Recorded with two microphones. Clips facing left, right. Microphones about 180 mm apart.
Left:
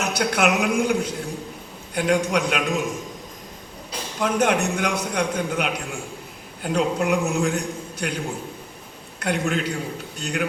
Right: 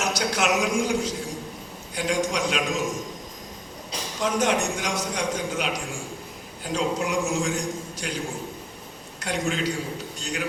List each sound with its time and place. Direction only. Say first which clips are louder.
0.0 s a man's voice: left 4 dB; 60° left (ahead or behind)
4.2 s a man's voice: left 3 dB; 55° left (ahead or behind)
9.2 s a man's voice: left 3 dB; 60° left (ahead or behind)